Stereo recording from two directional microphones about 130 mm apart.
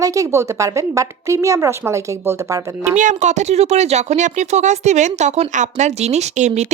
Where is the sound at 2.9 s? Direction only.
70° right (ahead or behind).